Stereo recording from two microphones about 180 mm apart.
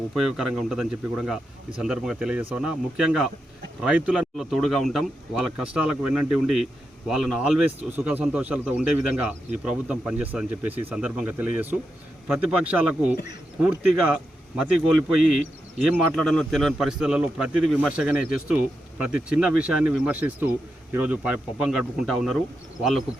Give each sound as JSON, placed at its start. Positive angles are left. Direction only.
{"t": 0.1, "sound": "speech", "side_deg": 0}